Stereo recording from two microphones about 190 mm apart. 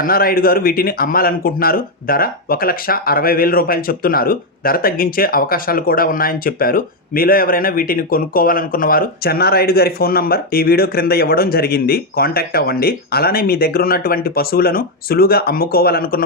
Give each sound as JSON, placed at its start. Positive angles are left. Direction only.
{"t": 0.0, "sound": "speech", "side_deg": 50}